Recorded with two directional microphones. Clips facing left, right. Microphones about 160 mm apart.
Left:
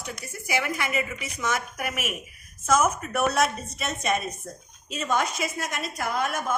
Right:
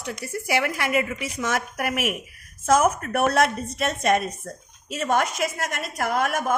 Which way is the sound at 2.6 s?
55° right (ahead or behind).